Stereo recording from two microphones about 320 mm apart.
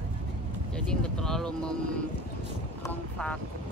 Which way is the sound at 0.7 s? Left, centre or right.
Centre.